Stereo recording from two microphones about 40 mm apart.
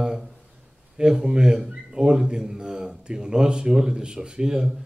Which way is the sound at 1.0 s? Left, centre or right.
Centre.